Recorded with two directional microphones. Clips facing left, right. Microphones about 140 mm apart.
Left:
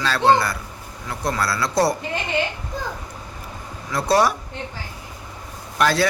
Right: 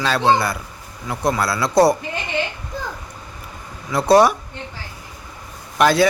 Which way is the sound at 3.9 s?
15° right (ahead or behind).